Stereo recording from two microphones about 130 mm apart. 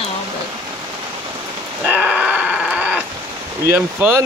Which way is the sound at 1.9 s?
10° right (ahead or behind).